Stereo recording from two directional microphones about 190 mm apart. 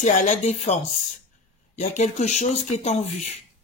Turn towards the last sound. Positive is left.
turn(degrees=35)  # may be behind; listen again after turning